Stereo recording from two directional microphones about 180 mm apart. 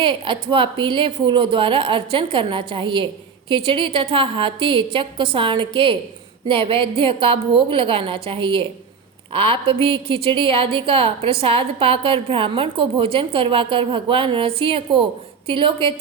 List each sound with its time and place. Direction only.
0.0 s a woman's voice: 30° right (ahead or behind)